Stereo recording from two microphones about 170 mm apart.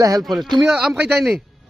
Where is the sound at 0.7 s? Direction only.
5° right (ahead or behind).